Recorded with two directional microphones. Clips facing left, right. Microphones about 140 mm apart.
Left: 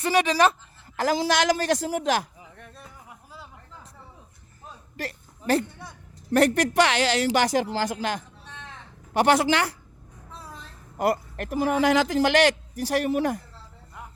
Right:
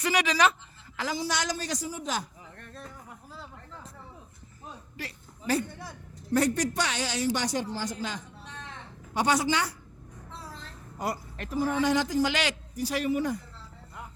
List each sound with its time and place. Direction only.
0.0 s speech: 25° left (ahead or behind)
1.0 s speech: 90° left
2.4 s a sound: 5° left (ahead or behind)
6.3 s speech: 80° left
10.9 s a man's voice: 60° left (ahead or behind); by 12.4 s 75° left (ahead or behind)
12.9 s speech: 60° left (ahead or behind)